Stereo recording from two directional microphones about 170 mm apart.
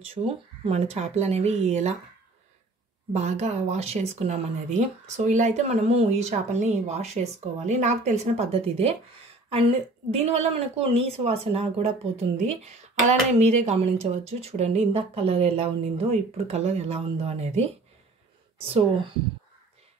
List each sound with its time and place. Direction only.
0.0 s speech: 35° right (ahead or behind)
3.1 s speech: 40° right (ahead or behind)